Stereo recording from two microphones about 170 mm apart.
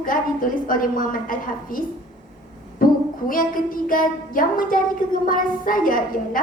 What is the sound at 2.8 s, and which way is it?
Child singing, 55° left (ahead or behind).